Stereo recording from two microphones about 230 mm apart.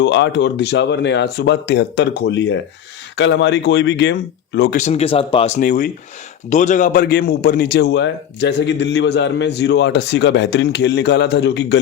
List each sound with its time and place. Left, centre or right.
0.0 s a man's voice: left
4.8 s a man's voice: left